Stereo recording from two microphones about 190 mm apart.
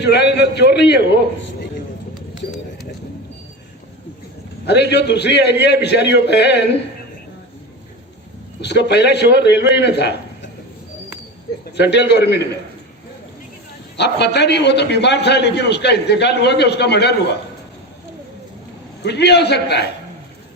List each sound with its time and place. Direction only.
0.0 s a man's voice: 60° left (ahead or behind)
4.6 s a man's voice: 60° left (ahead or behind)
8.6 s a man's voice: 60° left (ahead or behind)
11.6 s a man's voice: 60° left (ahead or behind)
13.9 s a man's voice: 60° left (ahead or behind)
19.0 s a man's voice: 60° left (ahead or behind)